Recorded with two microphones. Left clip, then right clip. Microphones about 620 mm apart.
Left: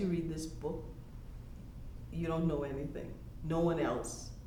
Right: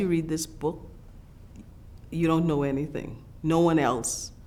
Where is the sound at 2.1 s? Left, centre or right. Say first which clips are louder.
Right 11 dB; right.